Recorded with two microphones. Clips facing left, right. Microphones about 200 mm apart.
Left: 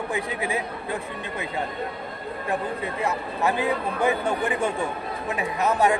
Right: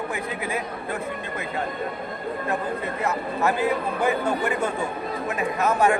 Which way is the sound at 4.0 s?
15° left (ahead or behind).